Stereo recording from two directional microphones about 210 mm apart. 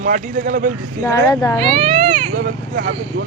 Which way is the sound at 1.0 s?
15° left (ahead or behind).